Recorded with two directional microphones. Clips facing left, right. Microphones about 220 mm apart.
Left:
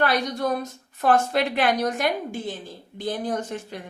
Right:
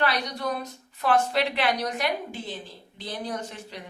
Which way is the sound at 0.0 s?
45° left (ahead or behind).